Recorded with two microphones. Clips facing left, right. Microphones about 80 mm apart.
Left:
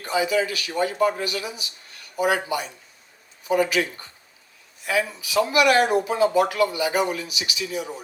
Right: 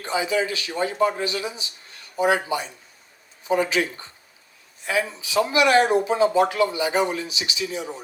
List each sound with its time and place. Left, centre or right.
0.0 s speech: right